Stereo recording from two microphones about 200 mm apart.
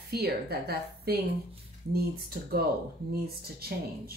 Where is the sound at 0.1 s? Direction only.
50° right (ahead or behind).